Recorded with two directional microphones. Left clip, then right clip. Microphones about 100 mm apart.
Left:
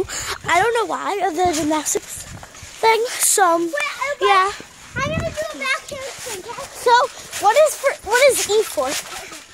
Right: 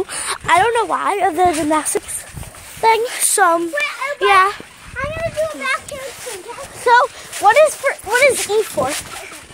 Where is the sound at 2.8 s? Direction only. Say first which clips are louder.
Right 2 dB; 25° left (ahead or behind).